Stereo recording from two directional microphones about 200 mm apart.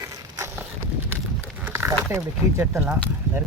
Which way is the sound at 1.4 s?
10° right (ahead or behind).